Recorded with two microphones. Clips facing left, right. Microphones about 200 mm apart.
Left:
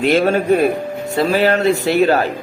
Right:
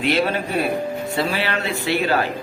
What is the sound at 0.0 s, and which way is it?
A man's voice, 45° left (ahead or behind).